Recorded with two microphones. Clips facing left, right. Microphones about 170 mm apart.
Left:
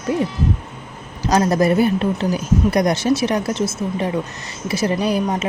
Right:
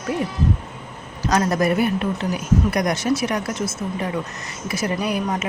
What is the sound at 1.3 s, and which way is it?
A woman's voice, 30° left (ahead or behind).